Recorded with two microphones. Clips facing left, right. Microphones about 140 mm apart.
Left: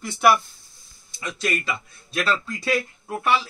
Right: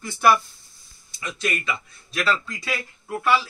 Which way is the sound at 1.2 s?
35° left (ahead or behind).